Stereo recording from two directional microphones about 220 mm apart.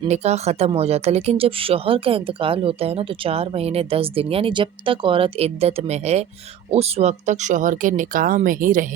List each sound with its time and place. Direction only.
0.0 s speech: 30° right (ahead or behind)